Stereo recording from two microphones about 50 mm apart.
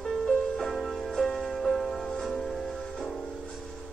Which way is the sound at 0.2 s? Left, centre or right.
Centre.